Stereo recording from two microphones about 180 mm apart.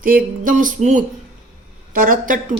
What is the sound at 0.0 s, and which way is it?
A woman's voice, 50° right (ahead or behind).